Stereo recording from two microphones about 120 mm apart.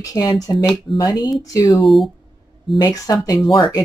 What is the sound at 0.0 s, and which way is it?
Speech, 30° left (ahead or behind).